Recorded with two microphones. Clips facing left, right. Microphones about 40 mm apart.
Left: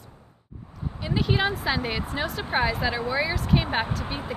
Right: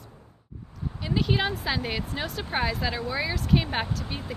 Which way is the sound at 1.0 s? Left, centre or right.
Centre.